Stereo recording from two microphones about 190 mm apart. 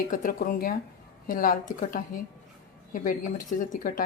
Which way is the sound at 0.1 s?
45° left (ahead or behind).